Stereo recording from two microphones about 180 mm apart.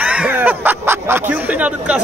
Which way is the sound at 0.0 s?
10° right (ahead or behind).